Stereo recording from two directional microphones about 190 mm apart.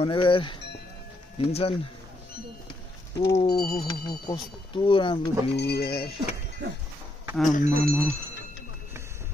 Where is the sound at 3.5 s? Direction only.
50° left (ahead or behind).